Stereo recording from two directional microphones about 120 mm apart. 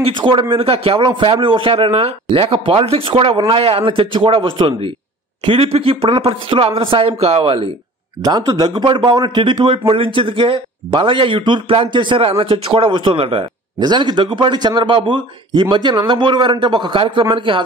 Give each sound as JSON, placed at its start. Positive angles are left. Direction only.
{"t": 0.0, "sound": "speech", "side_deg": -45}
{"t": 8.2, "sound": "speech", "side_deg": -30}
{"t": 13.7, "sound": "speech", "side_deg": -35}